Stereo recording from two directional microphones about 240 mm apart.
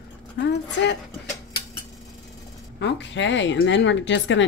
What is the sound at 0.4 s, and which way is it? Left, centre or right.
Speech, left.